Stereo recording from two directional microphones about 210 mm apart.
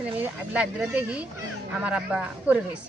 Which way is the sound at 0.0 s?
5° right (ahead or behind).